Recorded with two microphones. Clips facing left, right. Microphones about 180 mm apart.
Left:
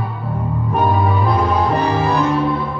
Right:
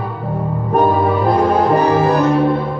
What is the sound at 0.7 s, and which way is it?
Music, 45° right (ahead or behind).